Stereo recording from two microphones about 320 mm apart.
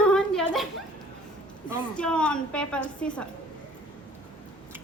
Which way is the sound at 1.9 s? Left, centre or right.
Centre.